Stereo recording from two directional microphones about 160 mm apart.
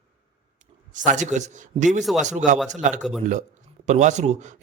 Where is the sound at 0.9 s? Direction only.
50° right (ahead or behind).